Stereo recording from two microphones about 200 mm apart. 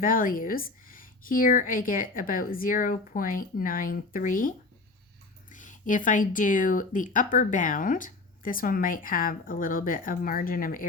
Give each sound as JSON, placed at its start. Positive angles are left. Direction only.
{"t": 0.0, "sound": "speech", "side_deg": 45}